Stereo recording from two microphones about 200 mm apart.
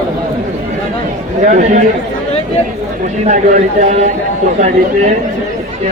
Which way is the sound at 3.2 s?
35° right (ahead or behind).